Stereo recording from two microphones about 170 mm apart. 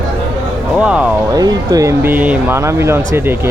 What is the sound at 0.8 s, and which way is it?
Speech, 5° right (ahead or behind).